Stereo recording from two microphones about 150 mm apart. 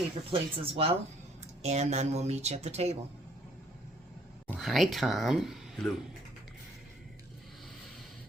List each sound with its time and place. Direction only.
0.3 s speech: 40° right (ahead or behind)
4.5 s speech: centre (ahead or behind)